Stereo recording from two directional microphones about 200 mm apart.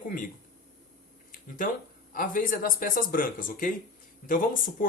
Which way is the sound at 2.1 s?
45° left (ahead or behind).